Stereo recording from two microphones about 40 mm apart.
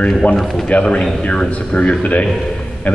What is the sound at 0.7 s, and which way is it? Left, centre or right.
Speech, left.